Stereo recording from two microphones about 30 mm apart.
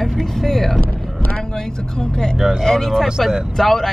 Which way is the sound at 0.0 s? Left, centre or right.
Centre.